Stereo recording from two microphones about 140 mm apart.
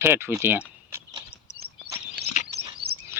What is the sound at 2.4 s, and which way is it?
Bird vocalization, 60° left (ahead or behind).